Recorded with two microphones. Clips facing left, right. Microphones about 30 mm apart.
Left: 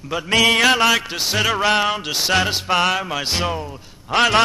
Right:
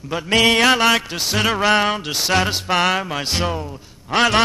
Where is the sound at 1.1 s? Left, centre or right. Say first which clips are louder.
Even; centre.